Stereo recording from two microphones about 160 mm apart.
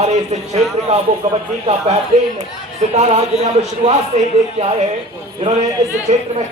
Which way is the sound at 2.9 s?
40° right (ahead or behind).